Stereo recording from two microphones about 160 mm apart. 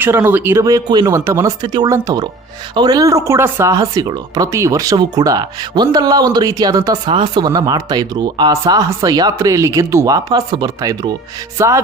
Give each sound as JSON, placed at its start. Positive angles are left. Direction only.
{"t": 0.0, "sound": "speech", "side_deg": -15}